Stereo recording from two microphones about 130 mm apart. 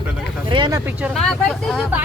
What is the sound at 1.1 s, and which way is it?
Speech, 5° left (ahead or behind).